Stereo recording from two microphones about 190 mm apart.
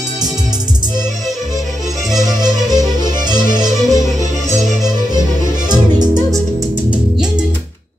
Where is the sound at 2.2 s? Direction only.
20° right (ahead or behind).